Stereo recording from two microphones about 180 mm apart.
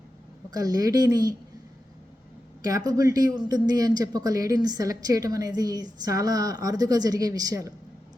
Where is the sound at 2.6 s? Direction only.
20° right (ahead or behind).